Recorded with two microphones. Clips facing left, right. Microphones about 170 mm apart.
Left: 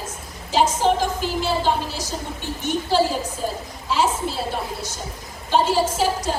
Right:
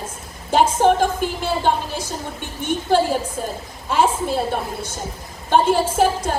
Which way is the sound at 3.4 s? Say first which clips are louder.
Even; 55° right (ahead or behind).